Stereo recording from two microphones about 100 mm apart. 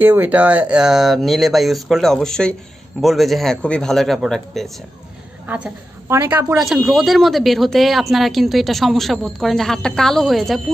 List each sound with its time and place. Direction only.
0.0 s speech: 20° right (ahead or behind); by 4.7 s centre (ahead or behind)
6.0 s a woman's voice: 25° right (ahead or behind)
6.6 s speech: centre (ahead or behind)